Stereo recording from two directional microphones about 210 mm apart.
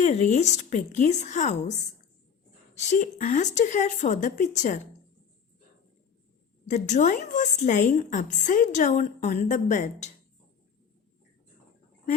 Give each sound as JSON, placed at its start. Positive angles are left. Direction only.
{"t": 0.0, "sound": "a woman's voice", "side_deg": 35}
{"t": 6.7, "sound": "a woman's voice", "side_deg": 35}